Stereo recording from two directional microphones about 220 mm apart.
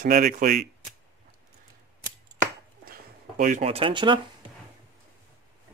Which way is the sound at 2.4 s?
40° right (ahead or behind).